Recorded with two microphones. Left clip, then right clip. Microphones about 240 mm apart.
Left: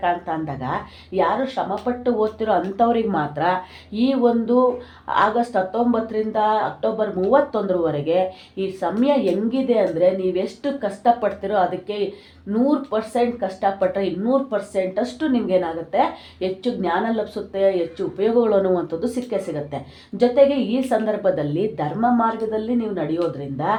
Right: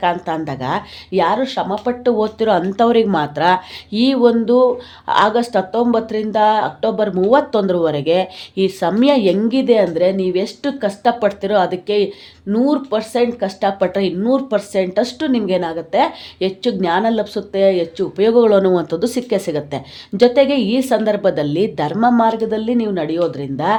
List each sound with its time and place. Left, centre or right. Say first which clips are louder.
0.0 s speech: right 4 dB; right